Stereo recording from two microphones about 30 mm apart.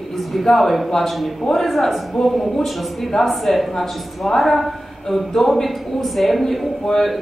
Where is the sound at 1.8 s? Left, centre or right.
Centre.